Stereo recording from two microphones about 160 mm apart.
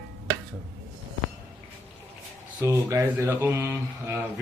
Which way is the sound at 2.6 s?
20° right (ahead or behind).